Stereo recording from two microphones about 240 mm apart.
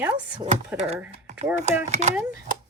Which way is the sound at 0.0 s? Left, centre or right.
Centre.